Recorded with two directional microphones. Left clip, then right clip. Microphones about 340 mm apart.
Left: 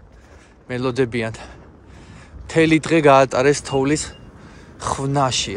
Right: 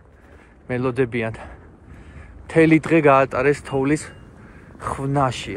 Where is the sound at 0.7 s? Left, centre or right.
Centre.